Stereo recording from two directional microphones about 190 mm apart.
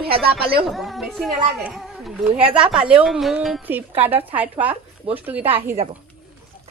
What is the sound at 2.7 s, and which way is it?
A woman's voice, 5° right (ahead or behind).